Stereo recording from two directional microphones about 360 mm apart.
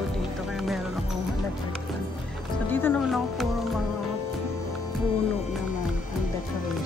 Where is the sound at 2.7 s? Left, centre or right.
Centre.